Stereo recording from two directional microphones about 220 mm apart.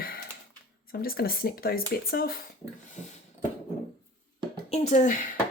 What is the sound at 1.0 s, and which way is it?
Speech, 40° left (ahead or behind).